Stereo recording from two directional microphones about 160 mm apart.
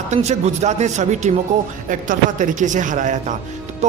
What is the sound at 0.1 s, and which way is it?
A man's voice, 45° right (ahead or behind).